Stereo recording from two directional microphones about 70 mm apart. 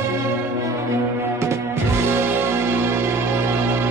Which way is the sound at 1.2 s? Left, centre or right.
Right.